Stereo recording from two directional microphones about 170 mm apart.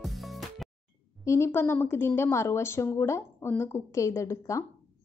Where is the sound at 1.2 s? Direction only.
15° left (ahead or behind).